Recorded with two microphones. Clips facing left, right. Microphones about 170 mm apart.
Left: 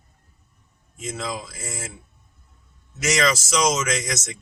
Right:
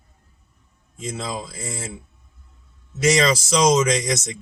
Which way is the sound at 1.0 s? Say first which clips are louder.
Right 1 dB; 25° right (ahead or behind).